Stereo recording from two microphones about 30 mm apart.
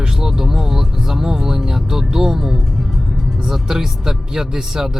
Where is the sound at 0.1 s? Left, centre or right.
Centre.